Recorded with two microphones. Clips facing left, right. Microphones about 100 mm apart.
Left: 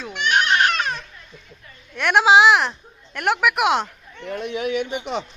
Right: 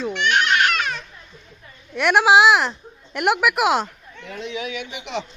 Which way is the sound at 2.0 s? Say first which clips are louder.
Even; 5° right (ahead or behind).